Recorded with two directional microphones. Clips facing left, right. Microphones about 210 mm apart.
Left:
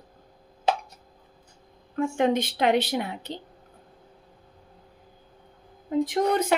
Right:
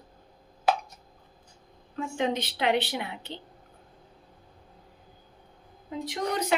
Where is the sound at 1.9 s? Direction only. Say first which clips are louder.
Left 6 dB; 55° left (ahead or behind).